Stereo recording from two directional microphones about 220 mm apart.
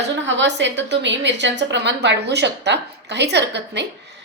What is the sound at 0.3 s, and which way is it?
A woman's voice, 55° right (ahead or behind).